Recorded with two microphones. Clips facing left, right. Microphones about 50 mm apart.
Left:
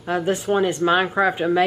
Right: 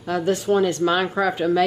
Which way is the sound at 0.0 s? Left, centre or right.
Left.